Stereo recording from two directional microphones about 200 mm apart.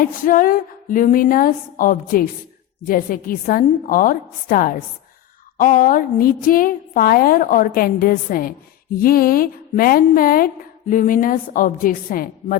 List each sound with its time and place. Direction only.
0.0 s a woman's voice: 45° left (ahead or behind)